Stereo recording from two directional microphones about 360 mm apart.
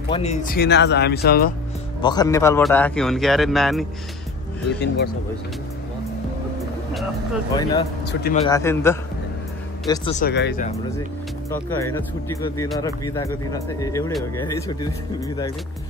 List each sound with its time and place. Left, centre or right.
0.1 s speech: centre
2.0 s a man's voice: centre
4.6 s speech: left
8.1 s speech: left
8.5 s speech: centre; by 10.7 s left
11.8 s speech: centre